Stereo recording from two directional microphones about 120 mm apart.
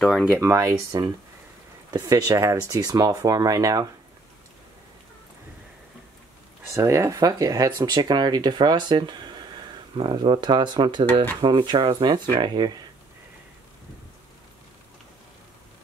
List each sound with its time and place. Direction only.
0.2 s speech: 15° right (ahead or behind)
1.9 s speech: 35° right (ahead or behind)
6.7 s speech: 25° right (ahead or behind)